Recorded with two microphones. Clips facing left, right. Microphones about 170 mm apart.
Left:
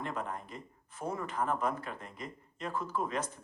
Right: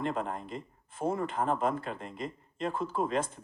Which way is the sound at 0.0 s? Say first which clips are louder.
Right 5 dB; 25° right (ahead or behind).